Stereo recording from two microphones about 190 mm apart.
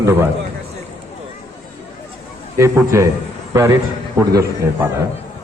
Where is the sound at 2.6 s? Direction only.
15° right (ahead or behind).